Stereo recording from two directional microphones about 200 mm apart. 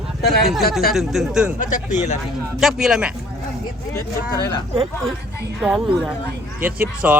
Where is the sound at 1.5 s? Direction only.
40° left (ahead or behind).